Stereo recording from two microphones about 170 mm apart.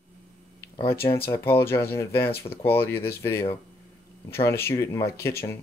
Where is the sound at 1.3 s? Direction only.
15° left (ahead or behind).